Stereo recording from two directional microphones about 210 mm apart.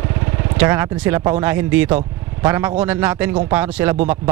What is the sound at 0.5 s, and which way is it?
A man's voice, 10° right (ahead or behind).